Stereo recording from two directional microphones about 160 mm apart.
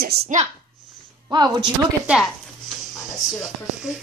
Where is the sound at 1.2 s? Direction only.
25° right (ahead or behind).